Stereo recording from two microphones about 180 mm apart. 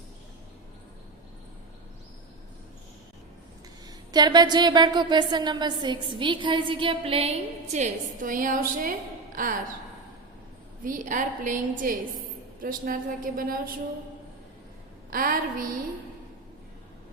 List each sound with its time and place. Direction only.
4.1 s a woman's voice: 25° right (ahead or behind); by 9.6 s 50° right (ahead or behind)
10.8 s a woman's voice: 45° right (ahead or behind)
15.1 s a woman's voice: 50° right (ahead or behind)